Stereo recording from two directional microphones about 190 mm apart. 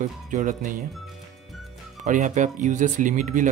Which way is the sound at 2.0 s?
40° right (ahead or behind).